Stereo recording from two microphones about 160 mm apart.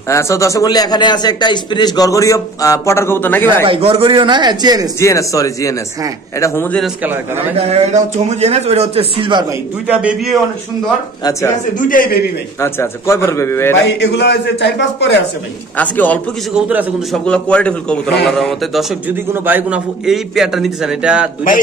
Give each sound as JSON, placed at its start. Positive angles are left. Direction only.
{"t": 0.1, "sound": "speech", "side_deg": 20}
{"t": 3.6, "sound": "a man's voice", "side_deg": -35}
{"t": 5.0, "sound": "a man's voice", "side_deg": 20}
{"t": 7.5, "sound": "a man's voice", "side_deg": -40}
{"t": 9.2, "sound": "a man's voice", "side_deg": -30}
{"t": 9.8, "sound": "a man's voice", "side_deg": -5}
{"t": 11.9, "sound": "a man's voice", "side_deg": 60}
{"t": 12.5, "sound": "a man's voice", "side_deg": 15}
{"t": 13.8, "sound": "a man's voice", "side_deg": 90}
{"t": 15.8, "sound": "a man's voice", "side_deg": 10}
{"t": 16.5, "sound": "a man's voice", "side_deg": -5}
{"t": 17.2, "sound": "a man's voice", "side_deg": 5}
{"t": 19.0, "sound": "a man's voice", "side_deg": -10}